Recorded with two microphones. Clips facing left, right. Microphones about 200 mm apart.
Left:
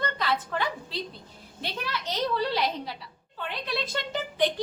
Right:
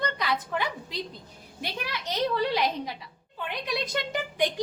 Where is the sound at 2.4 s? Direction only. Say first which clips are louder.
Right 1 dB; 15° right (ahead or behind).